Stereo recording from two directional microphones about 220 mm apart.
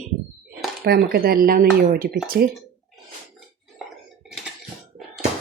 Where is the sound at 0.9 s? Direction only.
45° right (ahead or behind).